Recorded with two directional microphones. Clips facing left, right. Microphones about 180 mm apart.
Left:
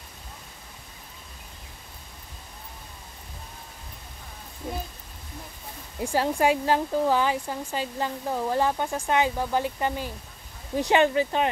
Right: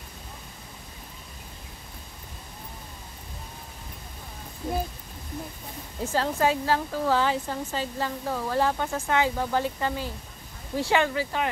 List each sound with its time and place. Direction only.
5.9 s speech: 15° left (ahead or behind)